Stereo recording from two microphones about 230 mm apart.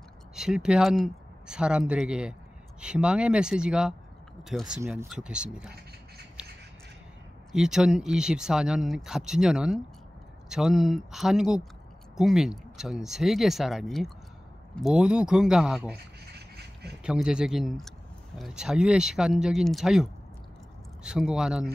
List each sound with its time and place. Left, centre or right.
0.4 s speech: centre
7.5 s speech: centre
15.9 s duck: right
17.0 s speech: centre